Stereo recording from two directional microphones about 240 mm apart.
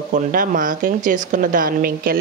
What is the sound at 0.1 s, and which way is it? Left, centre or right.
A woman's voice, right.